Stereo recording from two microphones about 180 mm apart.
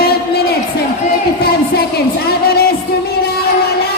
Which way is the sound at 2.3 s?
60° left (ahead or behind).